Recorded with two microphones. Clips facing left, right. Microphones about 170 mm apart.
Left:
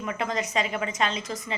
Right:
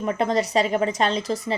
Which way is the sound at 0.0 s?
35° right (ahead or behind).